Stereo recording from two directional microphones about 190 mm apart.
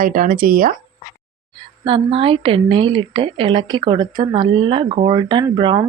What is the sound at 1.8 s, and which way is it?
A woman's voice, 30° right (ahead or behind).